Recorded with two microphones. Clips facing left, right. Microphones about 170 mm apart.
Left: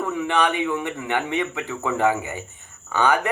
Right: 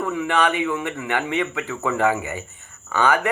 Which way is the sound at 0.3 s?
15° left (ahead or behind).